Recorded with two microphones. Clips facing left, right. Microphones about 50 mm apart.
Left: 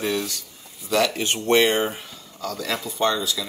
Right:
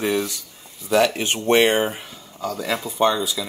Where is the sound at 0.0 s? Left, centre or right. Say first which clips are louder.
Right 3 dB; centre.